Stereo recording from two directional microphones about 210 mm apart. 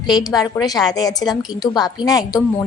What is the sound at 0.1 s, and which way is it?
A woman's voice, 15° left (ahead or behind).